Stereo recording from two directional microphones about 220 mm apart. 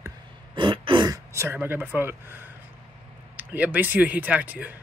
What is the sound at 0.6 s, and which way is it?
Speech, 20° right (ahead or behind).